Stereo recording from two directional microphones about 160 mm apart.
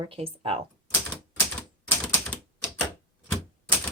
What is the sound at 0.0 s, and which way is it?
Speech, 35° right (ahead or behind).